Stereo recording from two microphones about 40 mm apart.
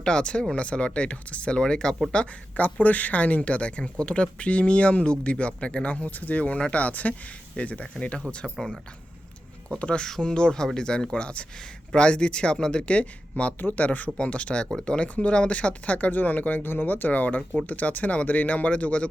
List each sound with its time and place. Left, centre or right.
0.0 s speech: left
2.6 s speech: left
6.1 s speech: left
9.6 s speech: left
10.0 s speech: centre
12.9 s speech: left
13.6 s speech: left
14.2 s speech: left